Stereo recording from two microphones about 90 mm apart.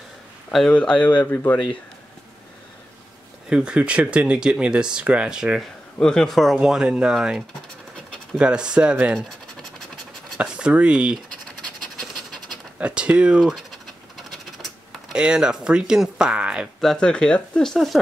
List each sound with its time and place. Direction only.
0.5 s speech: centre (ahead or behind)
0.7 s speech: 15° left (ahead or behind)
3.4 s speech: 10° right (ahead or behind)
5.9 s speech: 5° left (ahead or behind); by 9.1 s 15° right (ahead or behind)
10.3 s speech: 10° right (ahead or behind)
12.7 s scratch: 15° right (ahead or behind); by 15.1 s centre (ahead or behind)
15.1 s speech: 10° right (ahead or behind)
16.8 s speech: 10° left (ahead or behind)